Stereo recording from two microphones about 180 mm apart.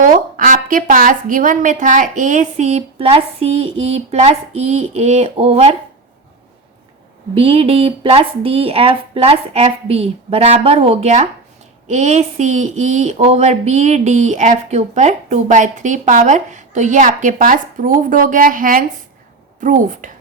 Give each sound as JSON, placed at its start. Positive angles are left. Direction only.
{"t": 0.0, "sound": "a woman's voice", "side_deg": -45}
{"t": 7.3, "sound": "a woman's voice", "side_deg": -30}